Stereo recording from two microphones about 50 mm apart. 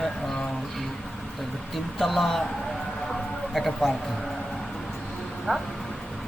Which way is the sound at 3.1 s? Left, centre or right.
Centre.